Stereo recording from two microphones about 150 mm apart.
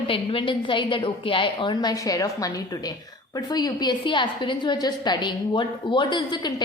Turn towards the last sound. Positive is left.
turn(degrees=30)  # may be behind; listen again after turning